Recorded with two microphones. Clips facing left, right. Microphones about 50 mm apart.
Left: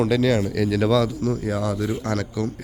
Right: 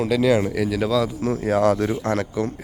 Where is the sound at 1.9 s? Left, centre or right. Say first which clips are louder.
Right 3 dB; right.